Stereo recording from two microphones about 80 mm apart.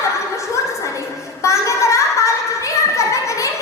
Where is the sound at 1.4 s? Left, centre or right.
Left.